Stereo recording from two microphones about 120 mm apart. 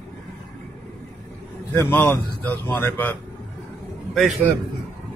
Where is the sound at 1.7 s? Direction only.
15° left (ahead or behind).